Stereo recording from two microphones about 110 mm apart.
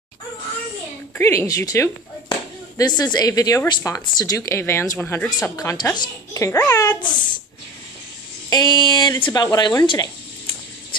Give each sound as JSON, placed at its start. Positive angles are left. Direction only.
{"t": 1.1, "sound": "a child's voice", "side_deg": 25}
{"t": 2.8, "sound": "a child's voice", "side_deg": 40}
{"t": 5.4, "sound": "a child's voice", "side_deg": 30}
{"t": 7.0, "sound": "speech", "side_deg": 45}
{"t": 8.5, "sound": "speech", "side_deg": 40}